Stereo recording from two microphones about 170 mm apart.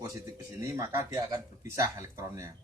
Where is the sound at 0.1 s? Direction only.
20° right (ahead or behind).